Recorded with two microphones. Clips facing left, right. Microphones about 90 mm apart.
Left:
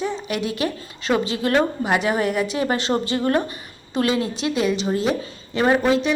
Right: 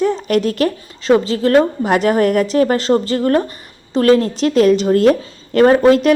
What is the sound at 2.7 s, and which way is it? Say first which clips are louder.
Speech: right 7 dB; 35° right (ahead or behind).